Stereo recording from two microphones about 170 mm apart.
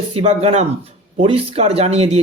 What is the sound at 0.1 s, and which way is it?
Speech, 35° right (ahead or behind).